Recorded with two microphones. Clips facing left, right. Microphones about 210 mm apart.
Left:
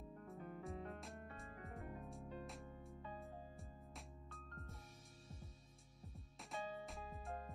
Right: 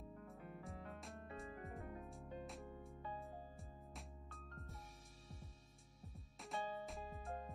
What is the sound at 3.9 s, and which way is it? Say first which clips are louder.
Music: even; centre (ahead or behind).